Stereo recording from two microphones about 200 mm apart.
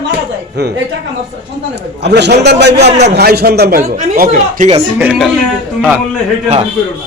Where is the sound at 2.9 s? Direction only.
35° right (ahead or behind).